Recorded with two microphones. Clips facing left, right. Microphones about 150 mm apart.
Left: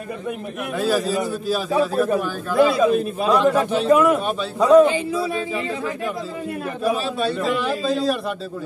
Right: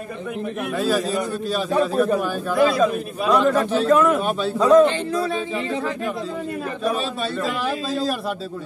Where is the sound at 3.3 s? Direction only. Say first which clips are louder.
Even; centre (ahead or behind).